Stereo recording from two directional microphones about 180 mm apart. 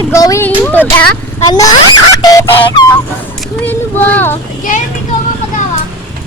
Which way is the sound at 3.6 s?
10° left (ahead or behind).